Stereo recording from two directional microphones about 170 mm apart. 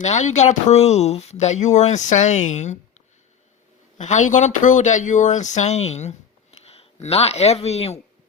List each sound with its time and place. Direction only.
0.0 s speech: 45° left (ahead or behind)
3.9 s speech: 45° left (ahead or behind)